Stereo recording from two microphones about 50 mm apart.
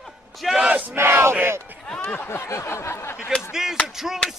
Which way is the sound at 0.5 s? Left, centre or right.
Right.